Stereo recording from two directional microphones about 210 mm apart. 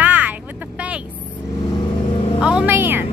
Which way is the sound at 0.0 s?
10° right (ahead or behind).